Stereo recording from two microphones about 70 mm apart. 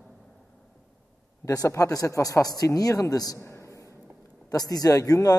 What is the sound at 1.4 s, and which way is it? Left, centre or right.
A man's voice, left.